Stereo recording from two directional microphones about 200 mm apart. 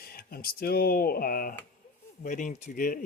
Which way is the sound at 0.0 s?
50° left (ahead or behind).